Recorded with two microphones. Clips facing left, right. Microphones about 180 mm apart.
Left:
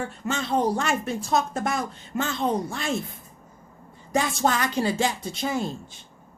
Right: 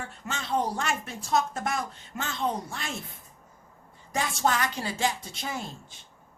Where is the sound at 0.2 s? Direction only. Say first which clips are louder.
Left 8 dB; 40° left (ahead or behind).